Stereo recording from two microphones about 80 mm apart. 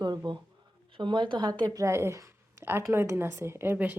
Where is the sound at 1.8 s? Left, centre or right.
Right.